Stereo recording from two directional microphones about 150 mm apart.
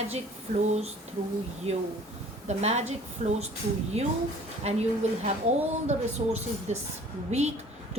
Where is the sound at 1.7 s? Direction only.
40° right (ahead or behind).